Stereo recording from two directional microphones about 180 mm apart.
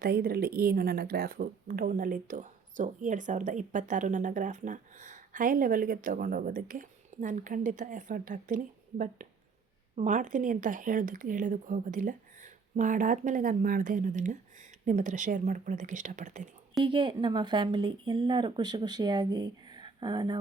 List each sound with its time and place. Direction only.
0.0 s speech: 55° right (ahead or behind)
16.8 s speech: 30° right (ahead or behind)